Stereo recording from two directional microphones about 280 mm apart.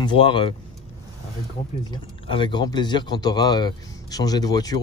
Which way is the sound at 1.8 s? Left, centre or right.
Centre.